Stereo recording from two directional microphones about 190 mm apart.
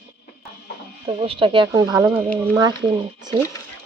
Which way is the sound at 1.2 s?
30° right (ahead or behind).